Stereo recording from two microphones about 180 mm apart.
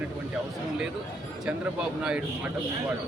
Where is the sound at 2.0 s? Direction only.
5° right (ahead or behind).